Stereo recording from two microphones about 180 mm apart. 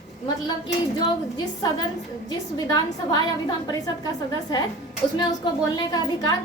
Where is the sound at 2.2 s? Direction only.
25° left (ahead or behind).